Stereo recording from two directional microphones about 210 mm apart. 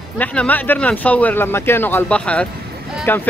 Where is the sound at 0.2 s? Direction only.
5° left (ahead or behind).